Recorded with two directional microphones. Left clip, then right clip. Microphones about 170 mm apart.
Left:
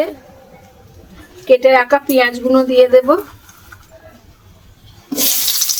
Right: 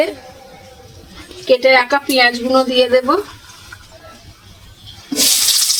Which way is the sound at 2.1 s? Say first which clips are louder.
Even; 20° left (ahead or behind).